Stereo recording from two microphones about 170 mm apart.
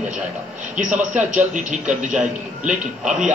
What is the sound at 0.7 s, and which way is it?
A man's voice, 45° right (ahead or behind).